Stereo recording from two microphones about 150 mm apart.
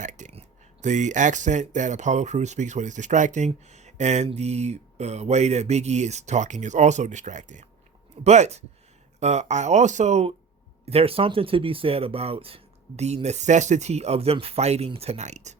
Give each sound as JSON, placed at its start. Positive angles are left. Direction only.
{"t": 0.0, "sound": "speech", "side_deg": -55}